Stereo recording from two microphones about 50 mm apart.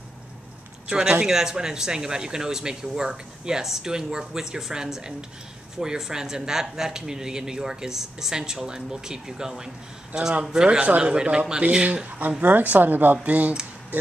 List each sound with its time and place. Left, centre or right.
0.8 s a man's voice: centre
12.2 s speech: right
13.2 s a man's voice: right